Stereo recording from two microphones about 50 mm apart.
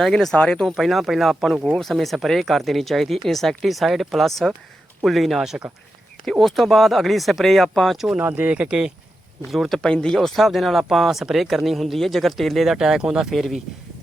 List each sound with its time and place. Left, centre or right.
0.0 s speech: centre
0.3 s speech: centre
0.6 s speech: centre
6.4 s speech: centre
8.2 s speech: right
9.5 s speech: centre
9.7 s speech: centre
10.2 s speech: centre
12.7 s speech: centre